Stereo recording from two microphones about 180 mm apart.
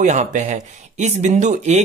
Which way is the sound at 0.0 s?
40° right (ahead or behind).